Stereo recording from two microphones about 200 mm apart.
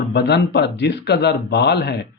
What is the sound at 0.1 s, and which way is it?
Speech, 55° left (ahead or behind).